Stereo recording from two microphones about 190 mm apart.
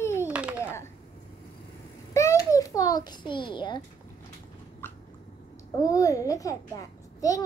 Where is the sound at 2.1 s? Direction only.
15° left (ahead or behind).